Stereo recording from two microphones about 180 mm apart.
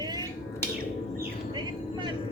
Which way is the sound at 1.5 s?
25° right (ahead or behind).